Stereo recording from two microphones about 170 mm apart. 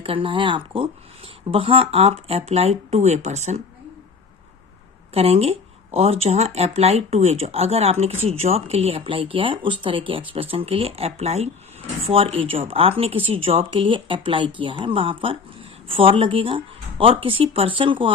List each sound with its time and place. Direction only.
0.0 s speech: 30° right (ahead or behind)
5.1 s speech: 35° right (ahead or behind)